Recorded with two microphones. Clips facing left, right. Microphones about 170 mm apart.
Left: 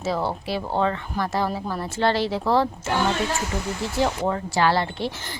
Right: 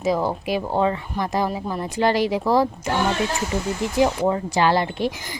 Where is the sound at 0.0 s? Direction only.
15° right (ahead or behind).